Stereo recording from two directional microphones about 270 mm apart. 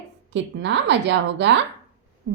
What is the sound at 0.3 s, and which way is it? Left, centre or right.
A woman's voice, right.